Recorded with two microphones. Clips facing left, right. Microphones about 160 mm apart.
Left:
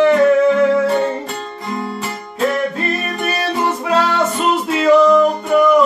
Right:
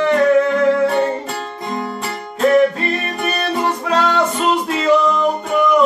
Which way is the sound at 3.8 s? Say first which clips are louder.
Left 1 dB; 5° left (ahead or behind).